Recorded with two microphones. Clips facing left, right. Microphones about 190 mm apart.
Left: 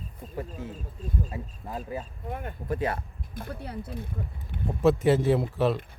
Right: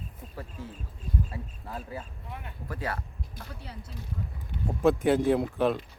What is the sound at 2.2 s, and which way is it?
Speech, 50° left (ahead or behind).